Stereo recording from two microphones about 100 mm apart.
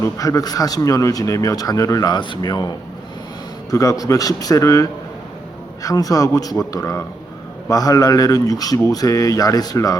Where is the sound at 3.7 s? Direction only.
35° left (ahead or behind).